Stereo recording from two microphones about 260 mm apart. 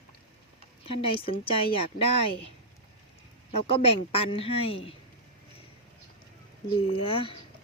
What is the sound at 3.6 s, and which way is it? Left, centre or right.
Speech, left.